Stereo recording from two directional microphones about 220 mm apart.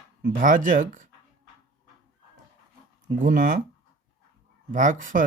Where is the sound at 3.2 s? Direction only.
40° right (ahead or behind).